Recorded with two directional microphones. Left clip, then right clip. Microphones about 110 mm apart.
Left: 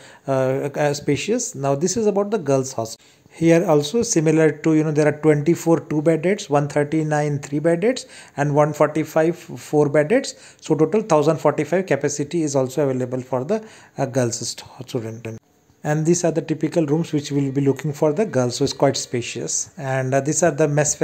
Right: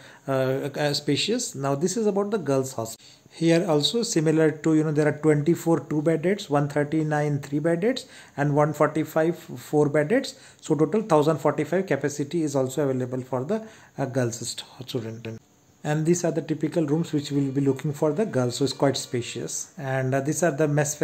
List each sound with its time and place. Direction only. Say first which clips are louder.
0.3 s speech: left 5 dB; 30° left (ahead or behind)
3.3 s speech: left 6 dB; 40° left (ahead or behind)